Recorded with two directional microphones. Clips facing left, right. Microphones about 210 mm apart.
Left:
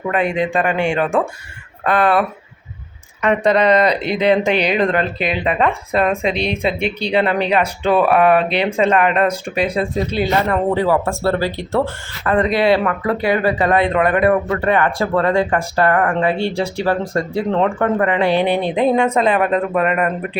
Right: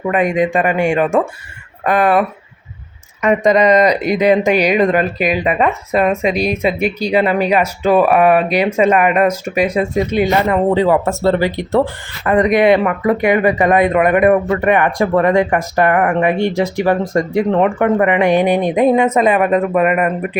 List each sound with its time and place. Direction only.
0.2 s a man's voice: 45° right (ahead or behind)
0.5 s speech: 5° right (ahead or behind)